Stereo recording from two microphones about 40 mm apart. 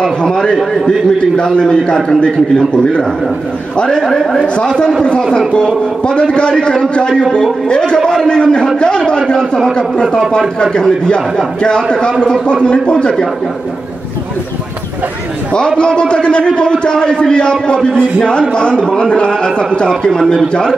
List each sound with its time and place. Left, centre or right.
0.0 s a man's voice: centre
3.9 s speech: centre
4.6 s a man's voice: left
6.0 s a man's voice: left
10.6 s a man's voice: left
15.8 s a man's voice: left